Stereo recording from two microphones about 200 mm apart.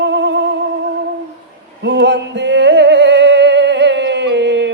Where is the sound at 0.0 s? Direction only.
60° right (ahead or behind).